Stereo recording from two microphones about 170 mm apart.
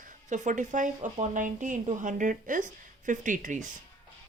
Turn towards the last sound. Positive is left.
turn(degrees=-50)  # may be behind; listen again after turning